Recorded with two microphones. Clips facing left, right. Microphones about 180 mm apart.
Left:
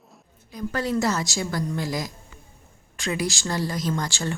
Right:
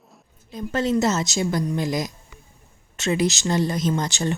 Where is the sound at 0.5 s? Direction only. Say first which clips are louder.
Right 3 dB; 25° right (ahead or behind).